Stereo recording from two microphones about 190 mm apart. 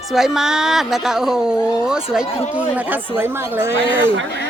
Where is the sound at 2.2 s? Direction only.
30° left (ahead or behind).